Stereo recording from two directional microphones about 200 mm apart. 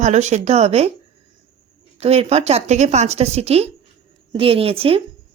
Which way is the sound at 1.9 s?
30° right (ahead or behind).